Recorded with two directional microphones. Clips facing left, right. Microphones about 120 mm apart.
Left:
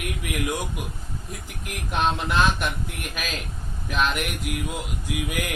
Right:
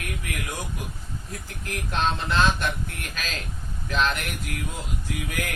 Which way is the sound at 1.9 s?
15° left (ahead or behind).